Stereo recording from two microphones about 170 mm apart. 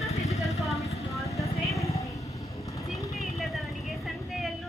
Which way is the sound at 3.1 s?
Centre (ahead or behind).